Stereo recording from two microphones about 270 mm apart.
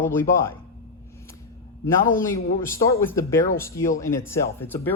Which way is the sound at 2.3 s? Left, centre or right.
Centre.